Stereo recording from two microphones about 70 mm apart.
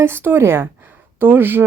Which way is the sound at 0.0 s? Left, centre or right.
Right.